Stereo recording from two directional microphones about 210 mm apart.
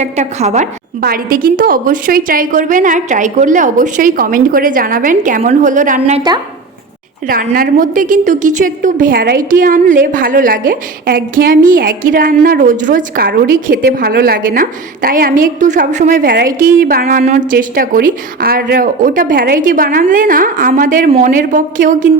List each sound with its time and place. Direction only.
0.0 s a woman's voice: 35° right (ahead or behind)
1.0 s a woman's voice: 45° right (ahead or behind)
7.3 s a woman's voice: 45° right (ahead or behind)